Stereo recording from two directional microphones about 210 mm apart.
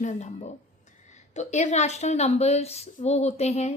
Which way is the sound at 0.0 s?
35° left (ahead or behind).